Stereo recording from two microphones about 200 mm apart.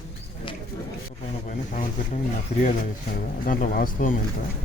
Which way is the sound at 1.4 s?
40° left (ahead or behind).